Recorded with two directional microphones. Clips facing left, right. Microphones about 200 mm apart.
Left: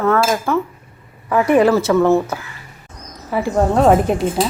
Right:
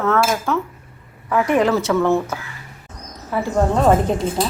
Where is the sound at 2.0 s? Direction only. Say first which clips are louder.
Left 4 dB; 15° left (ahead or behind).